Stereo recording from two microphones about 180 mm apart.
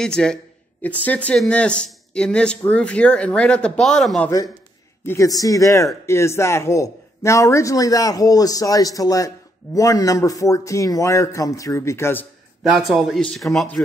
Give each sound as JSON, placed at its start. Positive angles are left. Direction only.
{"t": 0.0, "sound": "speech", "side_deg": 5}
{"t": 5.0, "sound": "speech", "side_deg": 15}
{"t": 12.6, "sound": "speech", "side_deg": 0}